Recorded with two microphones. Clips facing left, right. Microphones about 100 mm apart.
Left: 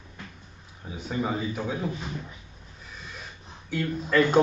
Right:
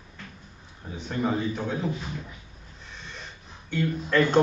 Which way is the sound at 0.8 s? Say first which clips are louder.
Right 1 dB; 5° left (ahead or behind).